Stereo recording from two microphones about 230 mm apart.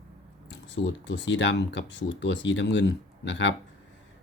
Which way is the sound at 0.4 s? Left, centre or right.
Left.